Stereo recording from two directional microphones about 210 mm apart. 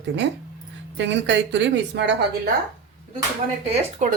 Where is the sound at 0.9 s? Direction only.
60° right (ahead or behind).